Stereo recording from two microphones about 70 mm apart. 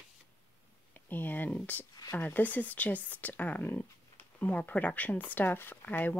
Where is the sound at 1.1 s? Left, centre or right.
Left.